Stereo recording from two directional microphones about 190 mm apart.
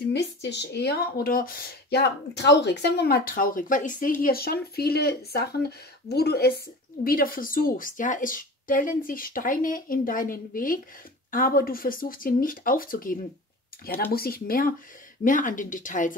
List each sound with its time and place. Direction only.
0.1 s a woman's voice: 65° left (ahead or behind); by 16.2 s 45° left (ahead or behind)